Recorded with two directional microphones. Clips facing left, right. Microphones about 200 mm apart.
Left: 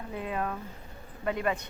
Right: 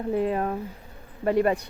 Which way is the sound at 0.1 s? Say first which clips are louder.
Right 8 dB; 40° right (ahead or behind).